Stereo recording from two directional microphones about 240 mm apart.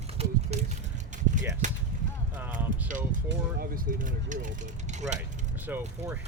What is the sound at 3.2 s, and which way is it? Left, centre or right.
Vehicle, right.